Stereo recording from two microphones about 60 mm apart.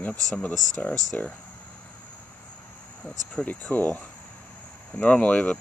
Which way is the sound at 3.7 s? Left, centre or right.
Left.